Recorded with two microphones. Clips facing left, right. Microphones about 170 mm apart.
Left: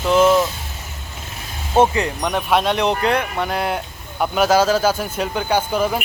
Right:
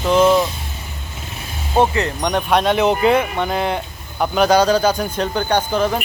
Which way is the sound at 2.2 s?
Centre (ahead or behind).